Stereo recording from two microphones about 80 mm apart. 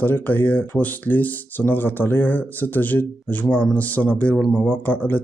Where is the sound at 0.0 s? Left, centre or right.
Left.